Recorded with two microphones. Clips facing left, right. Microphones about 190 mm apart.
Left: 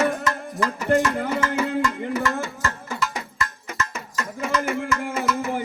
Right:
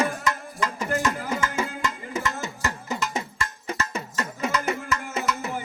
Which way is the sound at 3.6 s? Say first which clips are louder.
Right 1 dB; 30° right (ahead or behind).